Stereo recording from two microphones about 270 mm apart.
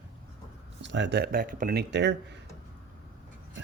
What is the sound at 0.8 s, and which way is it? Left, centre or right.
Speech, right.